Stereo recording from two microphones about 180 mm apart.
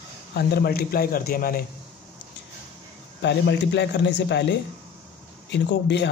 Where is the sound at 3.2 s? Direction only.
75° left (ahead or behind).